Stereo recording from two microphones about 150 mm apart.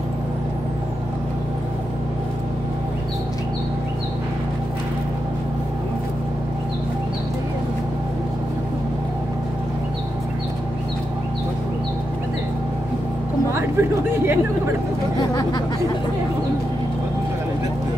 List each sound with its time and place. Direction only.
13.5 s vehicle: 15° right (ahead or behind)